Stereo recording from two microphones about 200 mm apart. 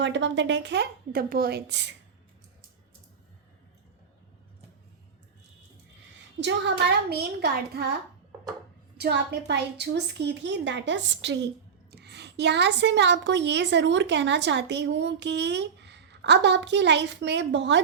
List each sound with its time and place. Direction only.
0.0 s a woman's voice: 65° right (ahead or behind)
6.4 s a woman's voice: 55° right (ahead or behind)
9.0 s a woman's voice: 55° right (ahead or behind)